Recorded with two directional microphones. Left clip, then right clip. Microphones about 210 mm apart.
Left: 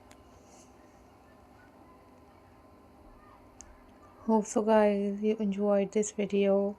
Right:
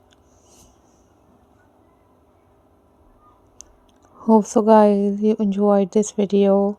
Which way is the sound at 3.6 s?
60° right (ahead or behind).